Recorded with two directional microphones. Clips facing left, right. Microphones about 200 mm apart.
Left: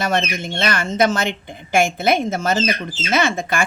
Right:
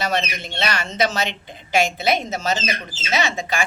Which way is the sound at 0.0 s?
50° left (ahead or behind).